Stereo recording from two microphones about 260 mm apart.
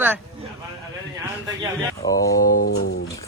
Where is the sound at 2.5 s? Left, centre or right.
Left.